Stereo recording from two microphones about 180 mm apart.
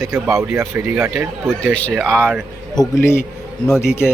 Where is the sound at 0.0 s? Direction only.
15° right (ahead or behind).